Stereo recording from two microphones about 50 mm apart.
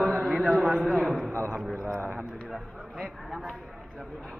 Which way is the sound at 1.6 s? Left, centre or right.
Centre.